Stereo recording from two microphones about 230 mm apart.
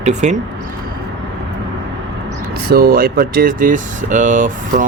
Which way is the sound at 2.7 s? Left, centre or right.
Right.